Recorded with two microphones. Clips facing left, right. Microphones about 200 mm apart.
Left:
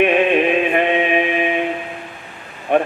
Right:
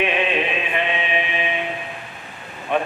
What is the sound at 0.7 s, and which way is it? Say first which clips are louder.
Chant: left 7 dB; 50° left (ahead or behind).